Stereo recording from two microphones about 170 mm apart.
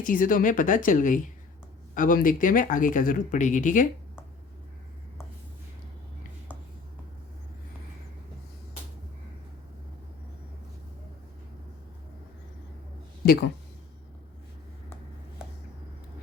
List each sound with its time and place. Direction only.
0.0 s speech: 55° left (ahead or behind)